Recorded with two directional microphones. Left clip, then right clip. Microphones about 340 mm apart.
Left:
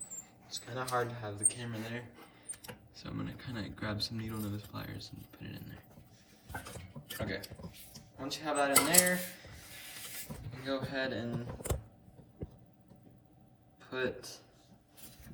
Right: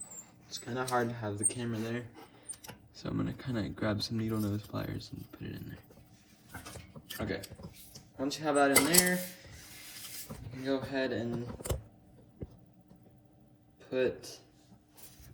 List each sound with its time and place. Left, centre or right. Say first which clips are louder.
0.4 s speech: right 3 dB; centre
7.2 s speech: right 2 dB; centre
10.7 s speech: right 3 dB; centre
13.8 s speech: right 5 dB; centre